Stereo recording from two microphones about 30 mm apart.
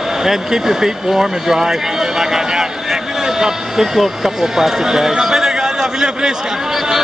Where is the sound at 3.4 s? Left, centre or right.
Centre.